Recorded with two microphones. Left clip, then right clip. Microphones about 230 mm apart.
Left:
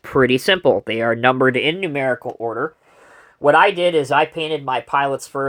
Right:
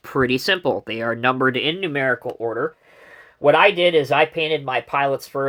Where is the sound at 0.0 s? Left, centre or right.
Centre.